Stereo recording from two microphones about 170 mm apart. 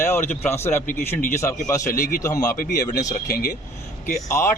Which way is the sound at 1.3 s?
15° left (ahead or behind).